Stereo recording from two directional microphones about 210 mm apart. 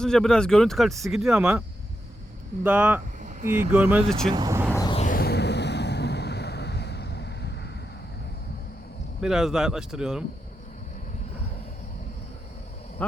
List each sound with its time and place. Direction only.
0.0 s speech: 5° left (ahead or behind)
2.6 s speech: 10° right (ahead or behind)
3.2 s a sound: 40° right (ahead or behind)
3.5 s speech: 10° right (ahead or behind)
4.3 s vehicle: 15° right (ahead or behind)
4.8 s a sound: 20° left (ahead or behind)
5.0 s vehicle: 45° left (ahead or behind)
9.2 s speech: 5° right (ahead or behind)
13.0 s speech: 5° left (ahead or behind)